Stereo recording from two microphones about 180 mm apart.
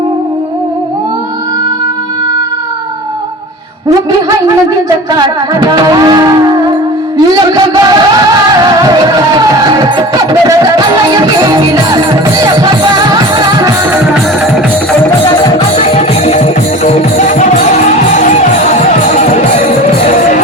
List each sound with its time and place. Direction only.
5.1 s music: 20° right (ahead or behind)
7.5 s music: 20° right (ahead or behind)
11.1 s music: 20° right (ahead or behind)
15.5 s music: 35° left (ahead or behind)